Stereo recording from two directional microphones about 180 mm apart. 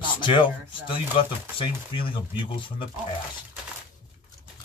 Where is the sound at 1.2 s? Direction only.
30° left (ahead or behind).